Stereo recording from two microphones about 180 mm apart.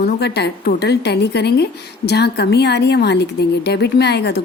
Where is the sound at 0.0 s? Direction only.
65° left (ahead or behind).